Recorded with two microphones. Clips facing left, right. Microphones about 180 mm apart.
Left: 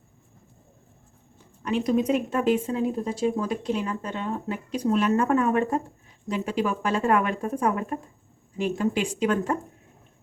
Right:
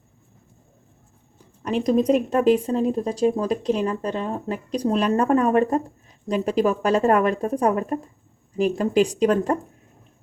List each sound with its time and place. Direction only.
1.6 s speech: 40° right (ahead or behind)